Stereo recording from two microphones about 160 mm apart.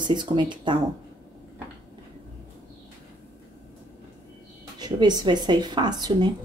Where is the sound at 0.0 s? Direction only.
30° right (ahead or behind).